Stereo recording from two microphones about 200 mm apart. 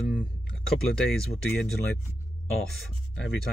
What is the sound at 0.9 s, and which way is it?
Speech, 5° left (ahead or behind).